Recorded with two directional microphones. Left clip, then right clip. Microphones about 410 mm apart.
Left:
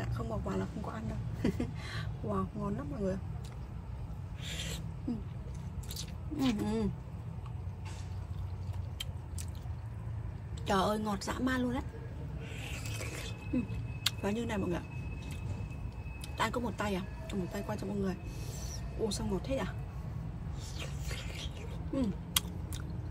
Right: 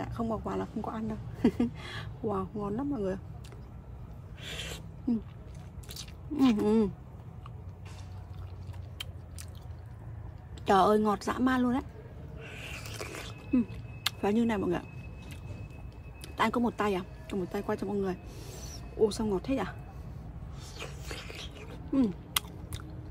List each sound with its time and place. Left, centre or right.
0.0 s speech: centre
4.4 s owl: centre
5.9 s a sound: centre
10.6 s speech: centre
12.4 s a sound: centre
16.3 s speech: centre
20.7 s whispering: centre